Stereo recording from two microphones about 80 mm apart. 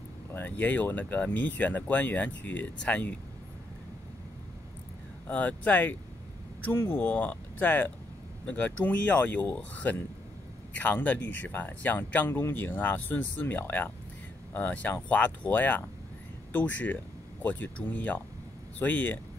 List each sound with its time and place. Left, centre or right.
0.3 s speech: left
5.2 s speech: centre